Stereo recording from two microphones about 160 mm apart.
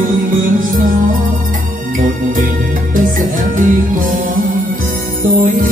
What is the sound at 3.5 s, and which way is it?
Music, 55° right (ahead or behind).